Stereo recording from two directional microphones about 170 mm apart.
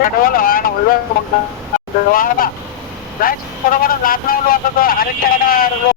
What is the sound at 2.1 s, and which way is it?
Speech, 55° left (ahead or behind).